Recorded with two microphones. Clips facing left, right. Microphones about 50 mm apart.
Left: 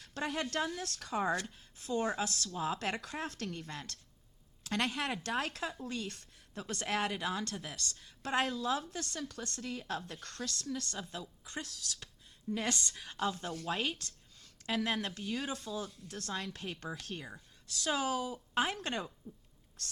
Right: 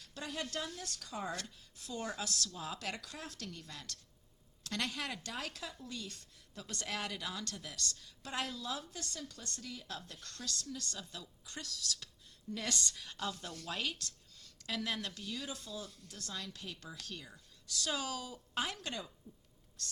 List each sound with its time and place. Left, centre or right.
0.2 s a woman's voice: left
1.3 s a woman's voice: left
18.8 s a woman's voice: left
19.3 s speech: left
19.8 s speech: left